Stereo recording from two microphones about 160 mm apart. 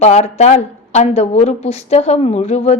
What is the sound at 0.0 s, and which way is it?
Speech, 45° left (ahead or behind).